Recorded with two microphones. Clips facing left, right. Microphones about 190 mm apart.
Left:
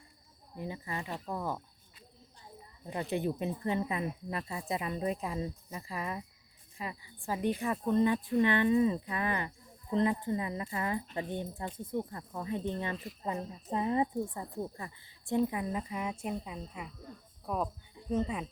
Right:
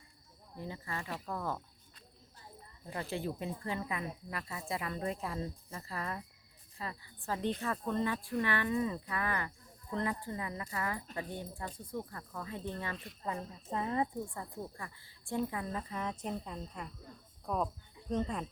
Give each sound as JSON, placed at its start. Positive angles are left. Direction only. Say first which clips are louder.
{"t": 0.5, "sound": "speech", "louder": "left 3 dB", "side_deg": 15}
{"t": 2.8, "sound": "speech", "louder": "left 5 dB", "side_deg": 20}